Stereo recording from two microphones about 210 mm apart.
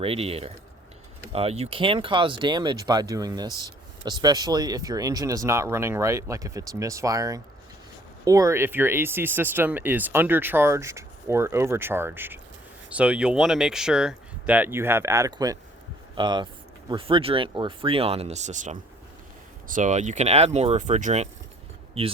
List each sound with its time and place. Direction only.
0.0 s speech: 25° right (ahead or behind)